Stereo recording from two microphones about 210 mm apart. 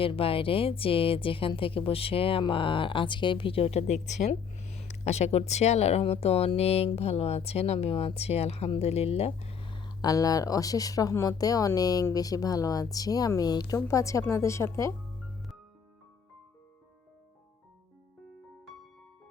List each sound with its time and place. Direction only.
0.0 s a woman's voice: 25° left (ahead or behind)